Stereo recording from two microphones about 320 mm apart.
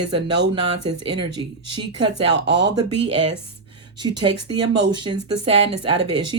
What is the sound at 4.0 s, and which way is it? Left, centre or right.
Speech, centre.